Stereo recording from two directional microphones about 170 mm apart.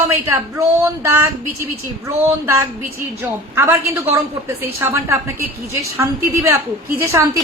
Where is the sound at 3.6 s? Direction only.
15° right (ahead or behind).